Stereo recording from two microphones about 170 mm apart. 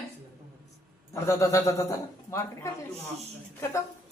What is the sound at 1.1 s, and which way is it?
A man's voice, 15° left (ahead or behind).